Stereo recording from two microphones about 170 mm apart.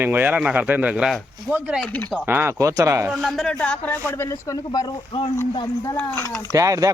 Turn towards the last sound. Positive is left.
turn(degrees=-20)  # may be behind; listen again after turning